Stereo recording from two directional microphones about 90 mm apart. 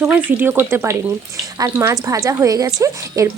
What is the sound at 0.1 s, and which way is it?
Speech, 20° right (ahead or behind).